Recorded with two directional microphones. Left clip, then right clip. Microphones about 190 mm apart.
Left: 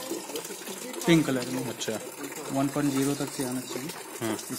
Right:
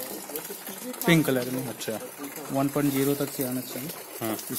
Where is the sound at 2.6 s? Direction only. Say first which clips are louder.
Right 2 dB; 40° right (ahead or behind).